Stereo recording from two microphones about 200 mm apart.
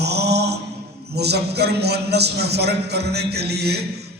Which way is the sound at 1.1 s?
55° right (ahead or behind).